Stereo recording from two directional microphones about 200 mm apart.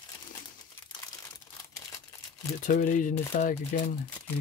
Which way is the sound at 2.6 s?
45° left (ahead or behind).